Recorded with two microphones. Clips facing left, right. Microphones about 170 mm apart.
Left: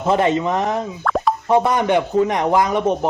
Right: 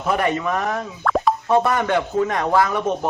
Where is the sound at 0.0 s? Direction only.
25° left (ahead or behind).